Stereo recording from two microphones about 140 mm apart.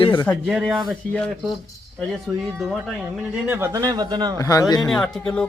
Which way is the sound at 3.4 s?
15° right (ahead or behind).